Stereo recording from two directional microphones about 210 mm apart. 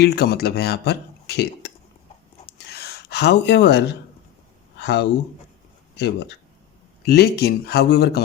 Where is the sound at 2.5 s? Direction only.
50° left (ahead or behind).